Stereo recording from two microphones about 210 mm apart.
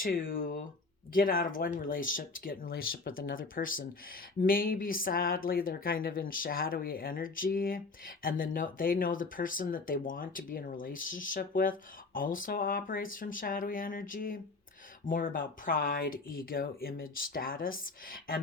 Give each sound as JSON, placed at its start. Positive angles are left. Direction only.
{"t": 0.0, "sound": "speech", "side_deg": 40}